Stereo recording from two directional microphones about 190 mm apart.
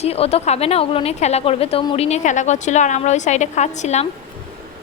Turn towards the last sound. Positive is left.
turn(degrees=35)  # may be behind; listen again after turning